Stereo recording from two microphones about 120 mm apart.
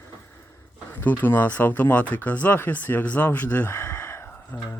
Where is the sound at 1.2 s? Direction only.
15° left (ahead or behind).